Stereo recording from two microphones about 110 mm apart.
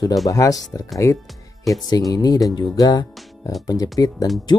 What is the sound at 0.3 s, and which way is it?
Speech, 30° left (ahead or behind).